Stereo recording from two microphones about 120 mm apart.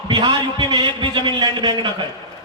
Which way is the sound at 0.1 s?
40° right (ahead or behind).